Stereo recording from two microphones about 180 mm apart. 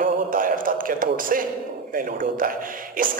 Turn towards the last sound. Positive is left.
turn(degrees=-50)  # may be behind; listen again after turning